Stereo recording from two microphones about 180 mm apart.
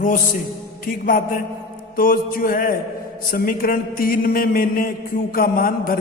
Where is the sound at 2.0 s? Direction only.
50° left (ahead or behind).